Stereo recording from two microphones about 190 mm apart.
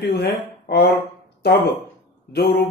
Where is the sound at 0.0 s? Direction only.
60° left (ahead or behind).